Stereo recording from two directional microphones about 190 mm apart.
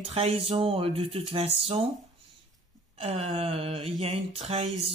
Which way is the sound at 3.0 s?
35° right (ahead or behind).